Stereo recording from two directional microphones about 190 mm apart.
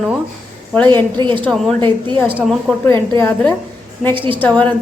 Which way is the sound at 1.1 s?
25° right (ahead or behind).